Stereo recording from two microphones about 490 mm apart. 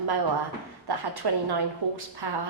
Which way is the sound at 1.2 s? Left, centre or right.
Right.